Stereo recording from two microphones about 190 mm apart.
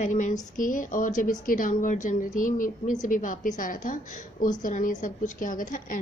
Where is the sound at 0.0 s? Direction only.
40° left (ahead or behind).